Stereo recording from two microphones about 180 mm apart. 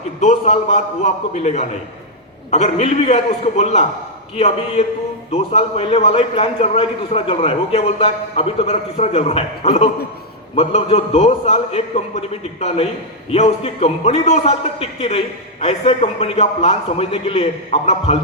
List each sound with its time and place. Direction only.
0.2 s a man's voice: 40° left (ahead or behind)